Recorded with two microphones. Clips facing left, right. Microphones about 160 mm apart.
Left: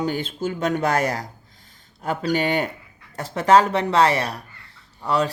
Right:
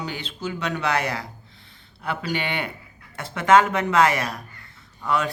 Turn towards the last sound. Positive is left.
turn(degrees=35)  # may be behind; listen again after turning